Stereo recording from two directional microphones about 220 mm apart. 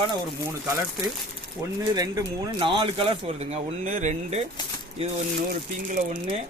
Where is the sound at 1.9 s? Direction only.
15° right (ahead or behind).